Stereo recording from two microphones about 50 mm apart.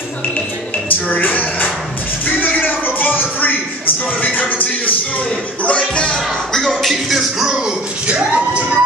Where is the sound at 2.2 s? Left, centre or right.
Left.